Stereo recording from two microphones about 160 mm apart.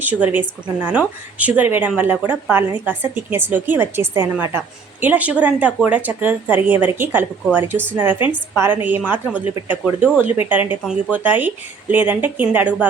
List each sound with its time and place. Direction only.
0.0 s a woman's voice: 10° right (ahead or behind)